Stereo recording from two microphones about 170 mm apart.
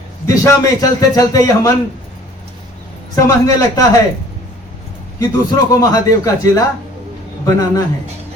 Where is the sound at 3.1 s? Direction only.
20° left (ahead or behind).